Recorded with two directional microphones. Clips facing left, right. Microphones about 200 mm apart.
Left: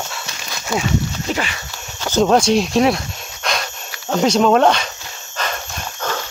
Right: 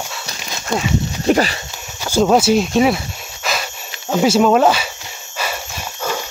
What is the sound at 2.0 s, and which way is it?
Speech, 5° right (ahead or behind).